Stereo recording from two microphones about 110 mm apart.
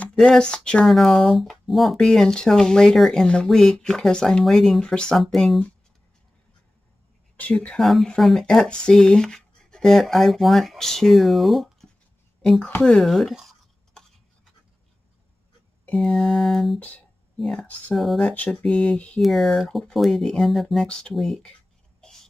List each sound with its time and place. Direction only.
0.0 s speech: 10° left (ahead or behind)
7.3 s speech: 15° left (ahead or behind)
13.9 s a sound: 5° left (ahead or behind)
15.8 s speech: 5° left (ahead or behind)
18.3 s speech: 10° left (ahead or behind)